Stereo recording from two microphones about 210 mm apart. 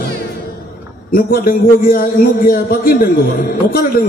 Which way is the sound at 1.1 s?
45° left (ahead or behind).